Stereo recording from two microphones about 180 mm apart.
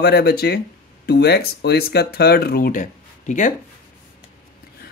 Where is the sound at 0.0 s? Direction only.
60° left (ahead or behind); by 3.5 s 45° left (ahead or behind).